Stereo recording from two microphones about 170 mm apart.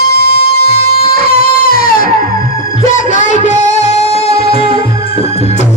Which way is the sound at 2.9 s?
45° left (ahead or behind).